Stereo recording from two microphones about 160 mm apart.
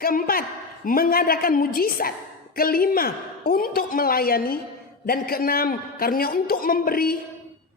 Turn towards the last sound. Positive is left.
turn(degrees=65)  # may be behind; listen again after turning